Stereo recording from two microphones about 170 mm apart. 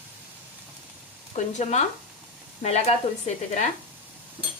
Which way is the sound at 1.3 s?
45° left (ahead or behind).